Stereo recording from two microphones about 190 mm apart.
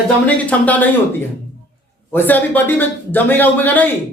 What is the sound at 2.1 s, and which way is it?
Speech, 10° left (ahead or behind).